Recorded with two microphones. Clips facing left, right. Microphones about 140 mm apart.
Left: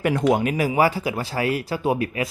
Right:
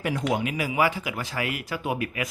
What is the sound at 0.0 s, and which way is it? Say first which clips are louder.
Speech: left 7 dB; 60° left (ahead or behind).